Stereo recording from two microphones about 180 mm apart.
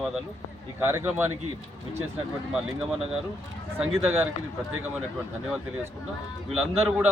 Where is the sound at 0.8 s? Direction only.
10° right (ahead or behind).